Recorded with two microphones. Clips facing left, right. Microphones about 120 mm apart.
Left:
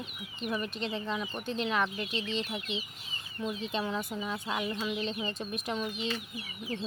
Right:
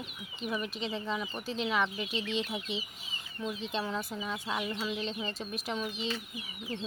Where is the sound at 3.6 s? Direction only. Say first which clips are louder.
Left 1 dB; centre (ahead or behind).